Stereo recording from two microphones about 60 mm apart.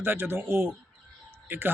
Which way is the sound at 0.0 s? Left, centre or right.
Right.